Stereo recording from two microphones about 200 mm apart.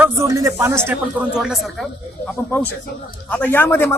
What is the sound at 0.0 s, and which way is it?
A man's voice, 15° right (ahead or behind).